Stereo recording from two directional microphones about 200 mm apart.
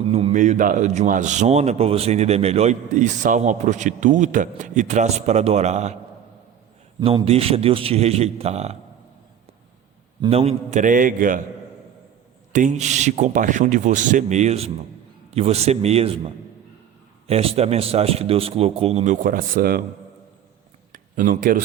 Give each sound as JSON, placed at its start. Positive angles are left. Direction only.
{"t": 0.0, "sound": "a man's voice", "side_deg": -30}
{"t": 7.0, "sound": "a man's voice", "side_deg": -25}
{"t": 10.2, "sound": "a man's voice", "side_deg": -30}
{"t": 12.5, "sound": "a man's voice", "side_deg": -35}
{"t": 17.2, "sound": "a man's voice", "side_deg": -30}
{"t": 20.9, "sound": "a sound", "side_deg": -40}